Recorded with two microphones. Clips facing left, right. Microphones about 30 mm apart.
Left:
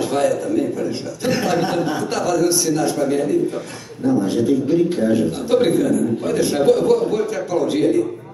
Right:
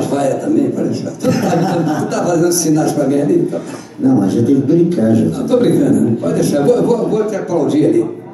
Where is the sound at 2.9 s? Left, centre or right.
Centre.